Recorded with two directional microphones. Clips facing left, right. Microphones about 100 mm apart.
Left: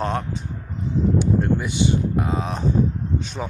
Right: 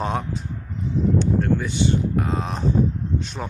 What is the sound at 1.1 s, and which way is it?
Speech, 10° left (ahead or behind).